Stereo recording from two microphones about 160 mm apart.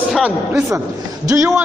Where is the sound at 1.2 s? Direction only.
20° right (ahead or behind).